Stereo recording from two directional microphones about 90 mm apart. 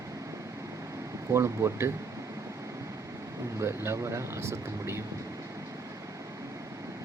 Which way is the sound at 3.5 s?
30° right (ahead or behind).